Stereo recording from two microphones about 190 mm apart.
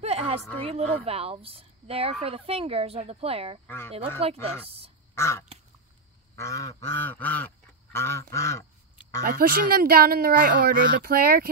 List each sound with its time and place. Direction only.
0.0 s a sound: 35° right (ahead or behind)
0.7 s speech: 30° right (ahead or behind)
3.6 s goose: 10° left (ahead or behind)
4.2 s speech: 30° right (ahead or behind)
5.1 s duck: 15° left (ahead or behind)
6.3 s goose: 15° left (ahead or behind)
9.2 s speech: 50° right (ahead or behind)